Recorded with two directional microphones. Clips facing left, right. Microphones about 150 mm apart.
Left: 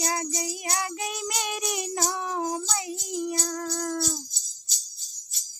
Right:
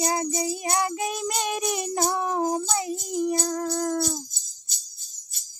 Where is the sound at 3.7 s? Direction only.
25° right (ahead or behind).